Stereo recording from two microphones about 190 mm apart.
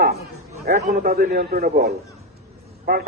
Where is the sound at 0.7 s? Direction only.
45° right (ahead or behind).